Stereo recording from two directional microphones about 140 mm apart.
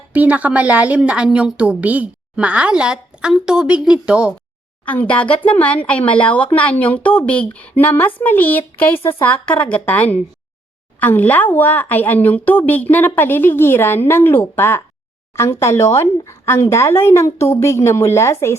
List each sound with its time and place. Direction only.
0.1 s a woman's voice: 10° right (ahead or behind)
4.9 s a woman's voice: 10° left (ahead or behind)